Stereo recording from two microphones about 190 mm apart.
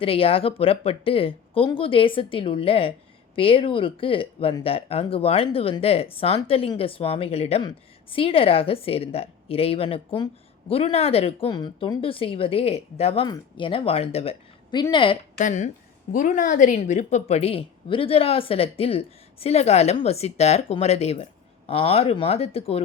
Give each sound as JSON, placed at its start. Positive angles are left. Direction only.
{"t": 0.0, "sound": "speech", "side_deg": 30}
{"t": 15.4, "sound": "a woman's voice", "side_deg": 40}